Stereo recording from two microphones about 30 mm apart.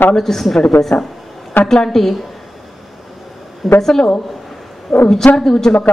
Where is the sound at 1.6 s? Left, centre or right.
Centre.